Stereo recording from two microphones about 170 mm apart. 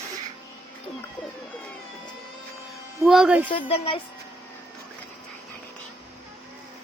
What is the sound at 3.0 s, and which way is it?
Speech, centre (ahead or behind).